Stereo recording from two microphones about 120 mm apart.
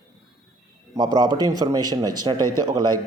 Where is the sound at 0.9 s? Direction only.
35° right (ahead or behind).